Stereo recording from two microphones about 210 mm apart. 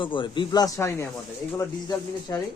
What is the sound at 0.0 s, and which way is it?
Speech, 25° left (ahead or behind).